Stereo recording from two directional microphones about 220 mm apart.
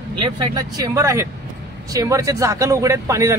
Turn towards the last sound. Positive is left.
turn(degrees=-15)  # may be behind; listen again after turning